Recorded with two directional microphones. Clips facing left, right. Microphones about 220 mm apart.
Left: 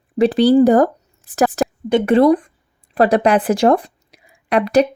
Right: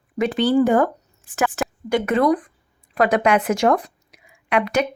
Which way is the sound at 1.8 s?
25° left (ahead or behind).